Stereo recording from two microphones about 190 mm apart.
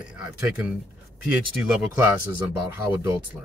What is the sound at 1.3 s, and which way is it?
Speech, 5° right (ahead or behind).